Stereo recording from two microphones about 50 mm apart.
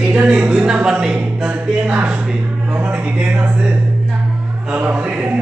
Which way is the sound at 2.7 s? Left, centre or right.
Right.